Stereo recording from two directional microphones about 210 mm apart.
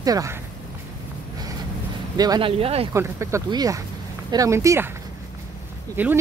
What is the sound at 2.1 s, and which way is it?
Speech, 20° right (ahead or behind).